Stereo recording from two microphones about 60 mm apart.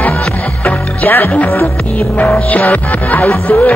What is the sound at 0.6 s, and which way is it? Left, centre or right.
Speech, left.